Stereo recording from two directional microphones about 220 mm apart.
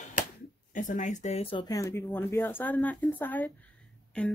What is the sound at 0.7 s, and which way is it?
Speech, 35° left (ahead or behind).